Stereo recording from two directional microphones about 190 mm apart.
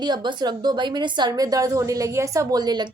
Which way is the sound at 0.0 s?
25° right (ahead or behind).